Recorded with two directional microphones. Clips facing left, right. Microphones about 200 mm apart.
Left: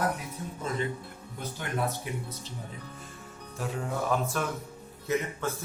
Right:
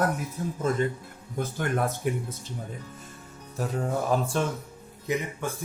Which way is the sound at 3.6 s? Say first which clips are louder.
Right 4 dB; 40° right (ahead or behind).